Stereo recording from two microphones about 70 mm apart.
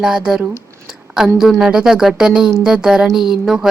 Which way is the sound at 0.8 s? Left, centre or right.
Centre.